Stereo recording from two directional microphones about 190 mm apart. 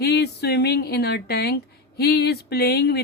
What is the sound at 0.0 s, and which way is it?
Speech, 60° left (ahead or behind).